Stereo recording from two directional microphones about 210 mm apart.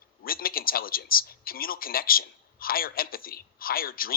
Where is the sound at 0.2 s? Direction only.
45° left (ahead or behind).